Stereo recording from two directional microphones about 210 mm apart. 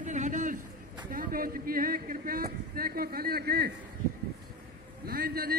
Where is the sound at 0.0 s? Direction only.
35° right (ahead or behind).